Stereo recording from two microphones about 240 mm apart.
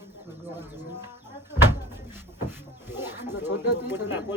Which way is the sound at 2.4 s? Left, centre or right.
Centre.